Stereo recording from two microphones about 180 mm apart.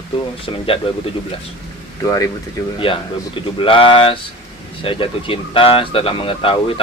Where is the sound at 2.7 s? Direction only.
30° left (ahead or behind).